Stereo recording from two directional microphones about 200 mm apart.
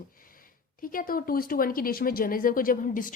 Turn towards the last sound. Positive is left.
turn(degrees=40)  # may be behind; listen again after turning